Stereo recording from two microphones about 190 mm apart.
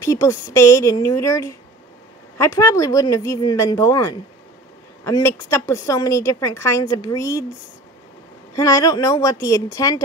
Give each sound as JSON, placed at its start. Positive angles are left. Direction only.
{"t": 0.0, "sound": "a woman's voice", "side_deg": 15}
{"t": 8.5, "sound": "speech", "side_deg": 15}